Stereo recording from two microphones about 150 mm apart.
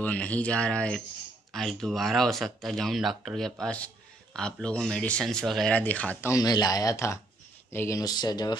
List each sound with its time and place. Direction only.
0.0 s speech: 10° left (ahead or behind)
6.3 s speech: 25° left (ahead or behind)
8.0 s speech: 25° left (ahead or behind)